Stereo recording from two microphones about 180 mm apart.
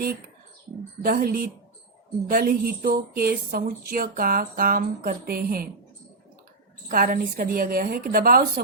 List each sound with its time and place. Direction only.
1.0 s a woman's voice: 55° right (ahead or behind)
6.8 s speech: 50° right (ahead or behind)